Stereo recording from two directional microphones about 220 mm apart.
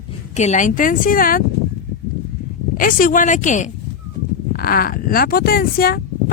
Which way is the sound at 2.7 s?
40° left (ahead or behind).